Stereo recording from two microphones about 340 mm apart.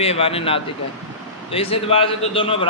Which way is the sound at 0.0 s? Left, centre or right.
Centre.